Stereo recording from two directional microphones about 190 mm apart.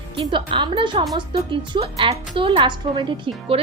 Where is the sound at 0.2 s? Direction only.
25° right (ahead or behind).